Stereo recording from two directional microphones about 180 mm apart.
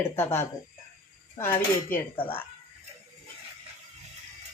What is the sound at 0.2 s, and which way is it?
Speech, 15° left (ahead or behind).